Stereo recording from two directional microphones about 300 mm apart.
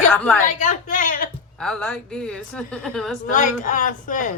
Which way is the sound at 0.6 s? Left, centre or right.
Left.